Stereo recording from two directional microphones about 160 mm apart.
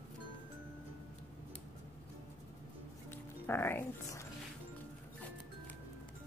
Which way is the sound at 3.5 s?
15° left (ahead or behind).